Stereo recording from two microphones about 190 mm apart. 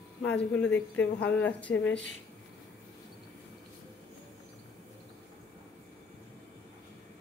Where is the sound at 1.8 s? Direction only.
80° left.